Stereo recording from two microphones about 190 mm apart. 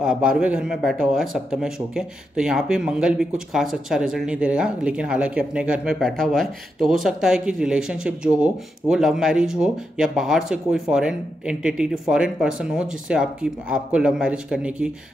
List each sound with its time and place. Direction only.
0.0 s speech: 5° right (ahead or behind)